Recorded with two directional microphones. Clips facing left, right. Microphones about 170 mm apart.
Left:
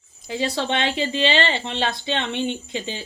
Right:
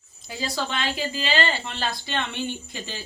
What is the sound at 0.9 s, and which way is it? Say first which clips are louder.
Speech: left 5 dB; 25° left (ahead or behind).